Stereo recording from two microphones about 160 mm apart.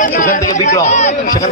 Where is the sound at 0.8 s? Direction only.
45° left (ahead or behind).